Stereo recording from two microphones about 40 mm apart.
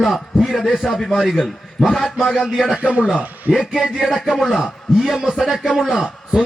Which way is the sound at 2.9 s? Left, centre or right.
Right.